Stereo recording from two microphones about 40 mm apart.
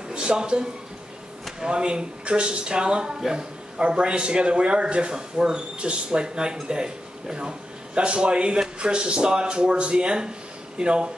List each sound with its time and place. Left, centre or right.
0.1 s a man's voice: right
1.7 s a man's voice: right